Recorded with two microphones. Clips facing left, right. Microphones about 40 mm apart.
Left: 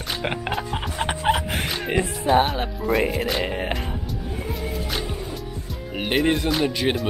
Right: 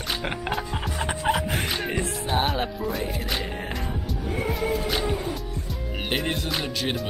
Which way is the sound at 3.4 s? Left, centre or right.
Left.